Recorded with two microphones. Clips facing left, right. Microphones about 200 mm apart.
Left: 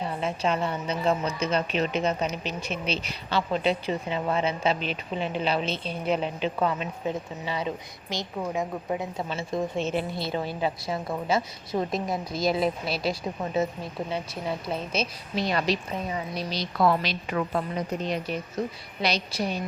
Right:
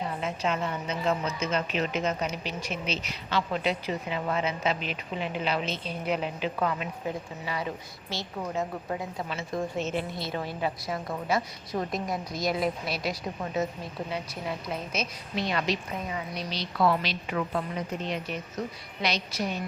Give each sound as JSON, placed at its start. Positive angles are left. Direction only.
{"t": 0.2, "sound": "a woman's voice", "side_deg": 30}
{"t": 14.7, "sound": "a woman's voice", "side_deg": 35}